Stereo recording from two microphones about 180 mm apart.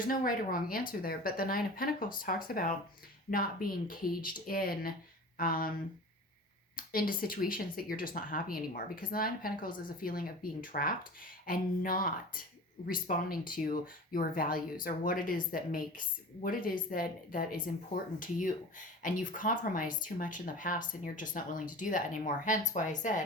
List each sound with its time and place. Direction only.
0.1 s speech: 50° left (ahead or behind)
6.7 s speech: 50° left (ahead or behind)